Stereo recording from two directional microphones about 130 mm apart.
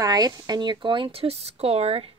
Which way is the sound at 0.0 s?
30° right (ahead or behind).